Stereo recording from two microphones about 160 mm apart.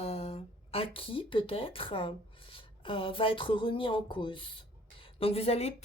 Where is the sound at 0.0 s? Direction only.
40° left (ahead or behind).